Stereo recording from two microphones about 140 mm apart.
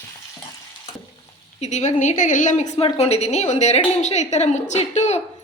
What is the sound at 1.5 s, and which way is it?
A woman's voice, 50° left (ahead or behind).